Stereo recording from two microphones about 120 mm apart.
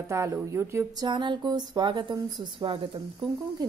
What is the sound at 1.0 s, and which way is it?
A woman's voice, 40° right (ahead or behind).